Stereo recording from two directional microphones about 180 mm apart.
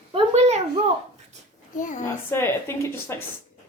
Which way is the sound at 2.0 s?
15° left (ahead or behind).